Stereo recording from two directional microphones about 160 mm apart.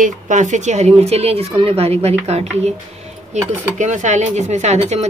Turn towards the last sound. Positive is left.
turn(degrees=-45)  # may be behind; listen again after turning